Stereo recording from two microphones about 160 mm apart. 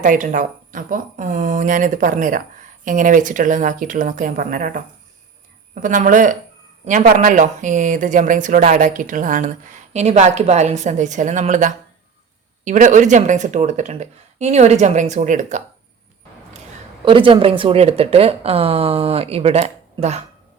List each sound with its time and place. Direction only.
0.0 s speech: 55° right (ahead or behind)
17.1 s speech: 30° right (ahead or behind)